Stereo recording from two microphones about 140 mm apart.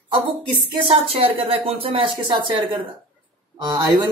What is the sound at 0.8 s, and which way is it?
Speech, 45° right (ahead or behind).